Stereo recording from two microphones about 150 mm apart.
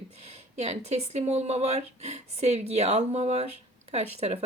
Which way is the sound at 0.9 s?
45° right (ahead or behind).